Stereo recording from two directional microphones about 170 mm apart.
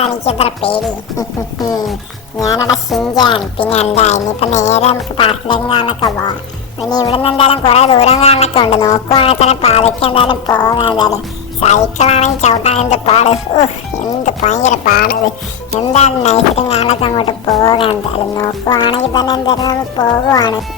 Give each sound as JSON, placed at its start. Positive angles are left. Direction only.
{"t": 0.0, "sound": "a woman's voice", "side_deg": 35}
{"t": 2.4, "sound": "speech", "side_deg": 20}
{"t": 3.7, "sound": "speech", "side_deg": 35}
{"t": 11.6, "sound": "speech", "side_deg": 40}
{"t": 14.9, "sound": "speech", "side_deg": 60}
{"t": 15.8, "sound": "speech", "side_deg": 40}